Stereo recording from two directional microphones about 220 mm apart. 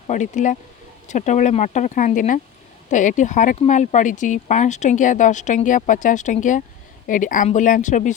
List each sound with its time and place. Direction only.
0.1 s speech: 35° left (ahead or behind)